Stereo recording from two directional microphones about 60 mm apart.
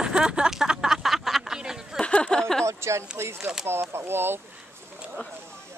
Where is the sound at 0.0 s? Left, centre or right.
Centre.